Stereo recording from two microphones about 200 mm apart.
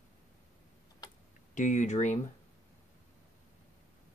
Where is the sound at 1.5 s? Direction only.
40° left (ahead or behind).